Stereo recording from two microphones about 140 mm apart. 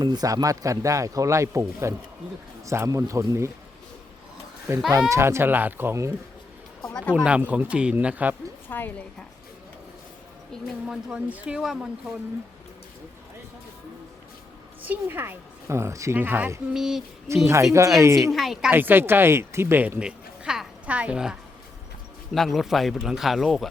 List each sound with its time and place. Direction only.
0.0 s speech: 30° right (ahead or behind)
4.9 s speech: 20° right (ahead or behind)
6.8 s speech: 5° left (ahead or behind)
7.3 s a woman's voice: 10° right (ahead or behind)
8.7 s a woman's voice: 15° left (ahead or behind)
10.5 s speech: 5° right (ahead or behind)
14.8 s a woman's voice: 15° right (ahead or behind)
16.7 s speech: 5° right (ahead or behind)
17.2 s speech: 20° right (ahead or behind)
18.3 s speech: centre (ahead or behind)
18.7 s speech: 15° right (ahead or behind)